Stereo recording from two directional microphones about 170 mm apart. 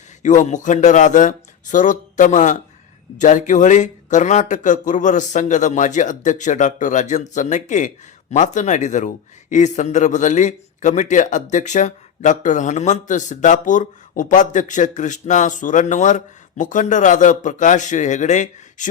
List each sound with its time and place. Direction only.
0.2 s speech: 45° left (ahead or behind)